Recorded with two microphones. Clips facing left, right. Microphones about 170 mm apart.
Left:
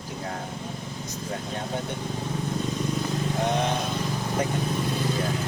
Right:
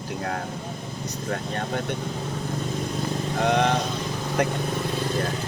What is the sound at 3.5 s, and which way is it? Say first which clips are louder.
Speech: right 4 dB; 65° right (ahead or behind).